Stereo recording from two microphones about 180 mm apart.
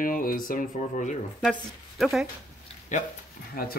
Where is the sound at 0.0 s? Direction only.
50° left (ahead or behind).